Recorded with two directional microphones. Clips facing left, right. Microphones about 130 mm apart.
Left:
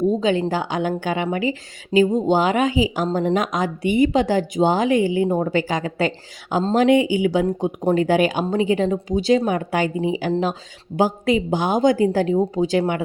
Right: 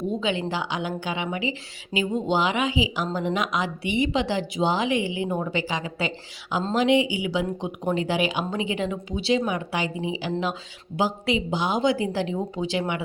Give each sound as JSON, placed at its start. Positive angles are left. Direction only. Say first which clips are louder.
{"t": 0.1, "sound": "a woman's voice", "louder": "left 7 dB", "side_deg": 40}